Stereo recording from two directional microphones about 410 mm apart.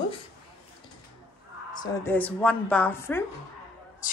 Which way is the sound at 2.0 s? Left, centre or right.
Centre.